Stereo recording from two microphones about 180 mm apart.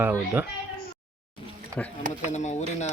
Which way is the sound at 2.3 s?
40° left (ahead or behind).